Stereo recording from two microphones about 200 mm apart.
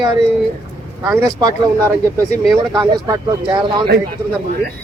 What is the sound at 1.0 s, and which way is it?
Speech, 15° right (ahead or behind).